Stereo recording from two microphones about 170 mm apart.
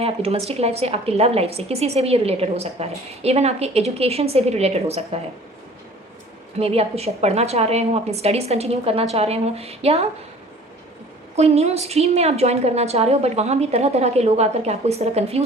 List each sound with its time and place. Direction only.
0.0 s a woman's voice: 35° right (ahead or behind)
6.6 s a woman's voice: 35° right (ahead or behind)
11.3 s a woman's voice: 40° right (ahead or behind)